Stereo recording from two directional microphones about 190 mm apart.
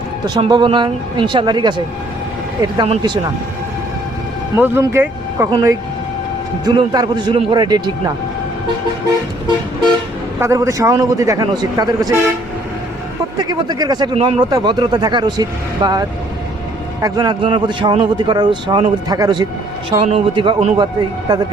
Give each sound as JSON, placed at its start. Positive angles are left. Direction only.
{"t": 0.3, "sound": "speech", "side_deg": -25}
{"t": 4.5, "sound": "a man's voice", "side_deg": -15}
{"t": 10.4, "sound": "a man's voice", "side_deg": -15}
{"t": 13.4, "sound": "speech", "side_deg": -20}